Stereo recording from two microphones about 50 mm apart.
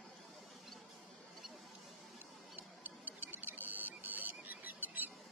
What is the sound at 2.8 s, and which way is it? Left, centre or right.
Clock, right.